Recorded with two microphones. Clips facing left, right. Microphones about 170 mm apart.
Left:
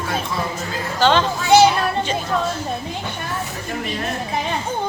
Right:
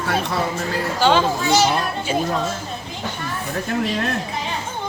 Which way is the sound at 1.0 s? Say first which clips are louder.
Even; 10° right (ahead or behind).